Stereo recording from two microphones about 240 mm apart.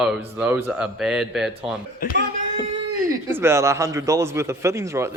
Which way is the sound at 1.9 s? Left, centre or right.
Left.